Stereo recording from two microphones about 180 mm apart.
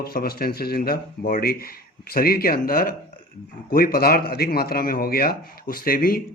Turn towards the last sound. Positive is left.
turn(degrees=55)  # may be behind; listen again after turning